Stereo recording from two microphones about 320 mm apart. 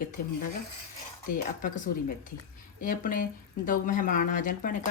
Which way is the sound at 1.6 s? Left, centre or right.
Left.